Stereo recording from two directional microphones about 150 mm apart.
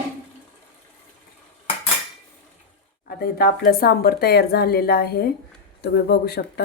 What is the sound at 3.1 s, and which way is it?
Speech, 90° left.